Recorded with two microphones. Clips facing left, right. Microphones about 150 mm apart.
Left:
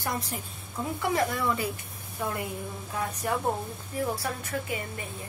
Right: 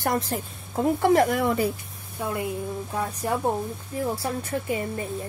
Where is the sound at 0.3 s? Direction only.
55° right (ahead or behind).